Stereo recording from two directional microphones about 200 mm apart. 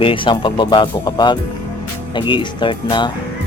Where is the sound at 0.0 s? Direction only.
25° left (ahead or behind).